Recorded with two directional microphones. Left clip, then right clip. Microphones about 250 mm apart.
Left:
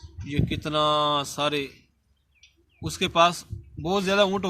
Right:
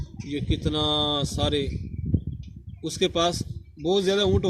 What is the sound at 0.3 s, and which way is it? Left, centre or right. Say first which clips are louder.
Speech: left 2 dB; centre.